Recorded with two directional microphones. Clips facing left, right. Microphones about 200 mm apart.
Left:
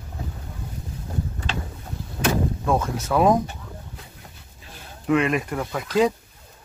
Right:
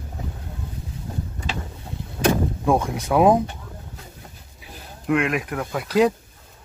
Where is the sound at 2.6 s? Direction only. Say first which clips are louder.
Right 2 dB; 15° right (ahead or behind).